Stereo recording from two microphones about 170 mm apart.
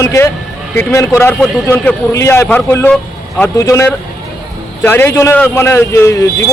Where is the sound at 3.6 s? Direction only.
15° left (ahead or behind).